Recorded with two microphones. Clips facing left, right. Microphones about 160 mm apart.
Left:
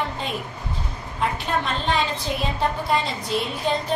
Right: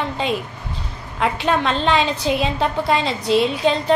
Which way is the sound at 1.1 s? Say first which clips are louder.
Right 5 dB; 90° right.